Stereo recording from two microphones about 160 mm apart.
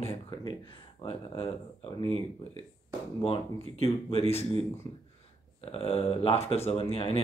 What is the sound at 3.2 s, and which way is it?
Speech, 30° left (ahead or behind).